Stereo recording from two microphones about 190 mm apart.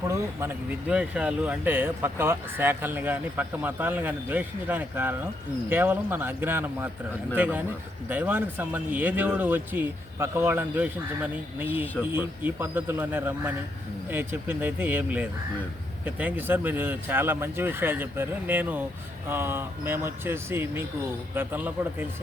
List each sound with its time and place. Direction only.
0.1 s speech: 15° right (ahead or behind)